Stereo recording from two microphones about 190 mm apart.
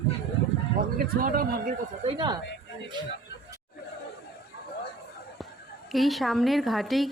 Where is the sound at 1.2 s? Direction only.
50° right (ahead or behind).